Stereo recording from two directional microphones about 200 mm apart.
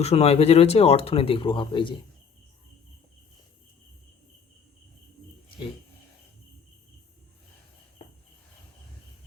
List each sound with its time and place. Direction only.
0.0 s speech: 30° left (ahead or behind)